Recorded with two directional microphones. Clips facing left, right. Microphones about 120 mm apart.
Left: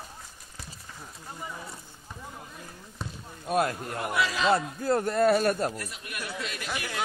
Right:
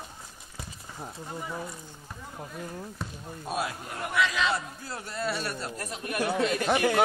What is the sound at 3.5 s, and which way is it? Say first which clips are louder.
A man's voice: left 6 dB; 55° left (ahead or behind).